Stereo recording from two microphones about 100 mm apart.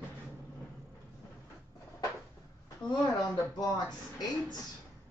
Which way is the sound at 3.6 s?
40° left (ahead or behind).